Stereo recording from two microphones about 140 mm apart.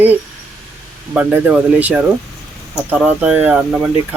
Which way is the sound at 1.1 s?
10° right (ahead or behind).